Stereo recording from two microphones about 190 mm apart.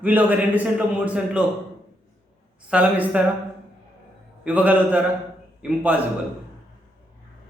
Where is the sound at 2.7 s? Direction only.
10° right (ahead or behind).